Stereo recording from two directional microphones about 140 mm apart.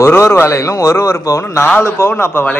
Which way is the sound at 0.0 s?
20° left (ahead or behind).